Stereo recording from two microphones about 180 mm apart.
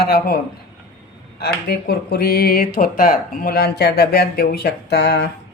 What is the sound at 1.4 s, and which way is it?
Speech, 65° left (ahead or behind).